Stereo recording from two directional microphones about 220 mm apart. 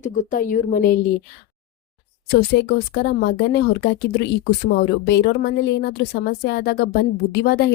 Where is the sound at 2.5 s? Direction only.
50° left (ahead or behind).